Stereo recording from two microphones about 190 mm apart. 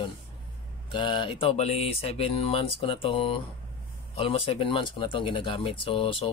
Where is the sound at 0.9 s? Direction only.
25° left (ahead or behind).